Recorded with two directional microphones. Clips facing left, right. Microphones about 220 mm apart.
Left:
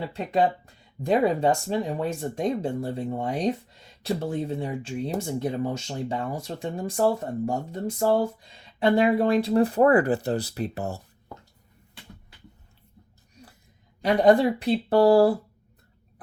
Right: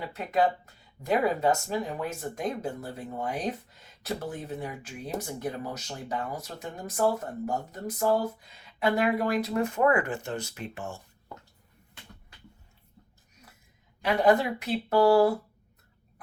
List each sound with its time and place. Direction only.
0.0 s speech: 30° left (ahead or behind)
14.0 s speech: 35° left (ahead or behind)